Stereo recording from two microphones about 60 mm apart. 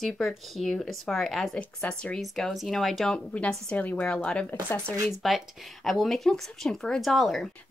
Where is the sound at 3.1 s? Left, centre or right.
Left.